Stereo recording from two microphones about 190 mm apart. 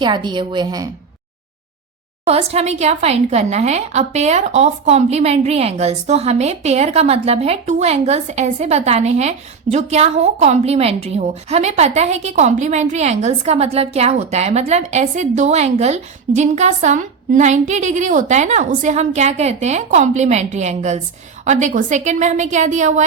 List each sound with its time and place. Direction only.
0.0 s a woman's voice: 25° right (ahead or behind)
2.2 s a woman's voice: 35° right (ahead or behind)